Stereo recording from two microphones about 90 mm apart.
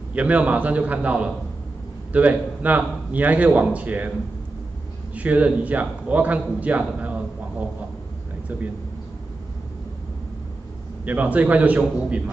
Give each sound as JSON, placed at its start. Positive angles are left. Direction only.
{"t": 0.1, "sound": "a man's voice", "side_deg": -15}
{"t": 5.1, "sound": "a man's voice", "side_deg": -15}
{"t": 11.1, "sound": "a man's voice", "side_deg": -15}